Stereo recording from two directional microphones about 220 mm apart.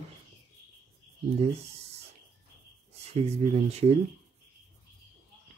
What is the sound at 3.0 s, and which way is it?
Speech, 30° right (ahead or behind).